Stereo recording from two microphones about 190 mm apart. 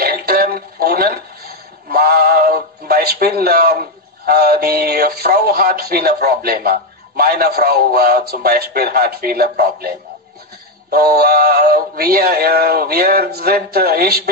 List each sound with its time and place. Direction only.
0.0 s music: 50° right (ahead or behind)
4.3 s synthetic singing: 55° right (ahead or behind)
10.9 s synthetic singing: 50° right (ahead or behind)